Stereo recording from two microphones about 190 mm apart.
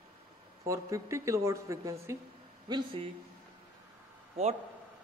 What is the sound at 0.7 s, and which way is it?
Speech, 15° right (ahead or behind).